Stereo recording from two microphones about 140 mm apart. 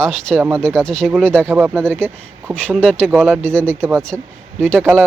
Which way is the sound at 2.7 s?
10° left (ahead or behind).